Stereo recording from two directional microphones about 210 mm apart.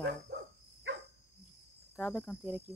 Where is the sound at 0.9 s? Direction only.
60° right (ahead or behind).